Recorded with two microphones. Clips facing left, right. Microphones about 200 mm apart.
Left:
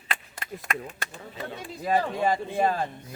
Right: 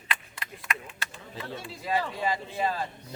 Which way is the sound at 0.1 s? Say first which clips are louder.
Left 3 dB; 45° left (ahead or behind).